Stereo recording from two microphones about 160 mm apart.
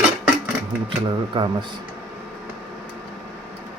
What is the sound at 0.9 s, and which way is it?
Speech, 30° right (ahead or behind).